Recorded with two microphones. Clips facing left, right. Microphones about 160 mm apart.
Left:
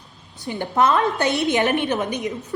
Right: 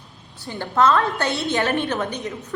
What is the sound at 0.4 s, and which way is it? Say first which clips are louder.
Speech: even; 20° left (ahead or behind).